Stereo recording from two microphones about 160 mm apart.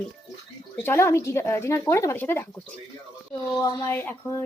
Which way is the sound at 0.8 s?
15° left (ahead or behind).